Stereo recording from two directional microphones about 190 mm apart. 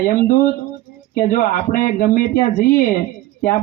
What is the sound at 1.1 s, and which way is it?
Speech, 45° left (ahead or behind).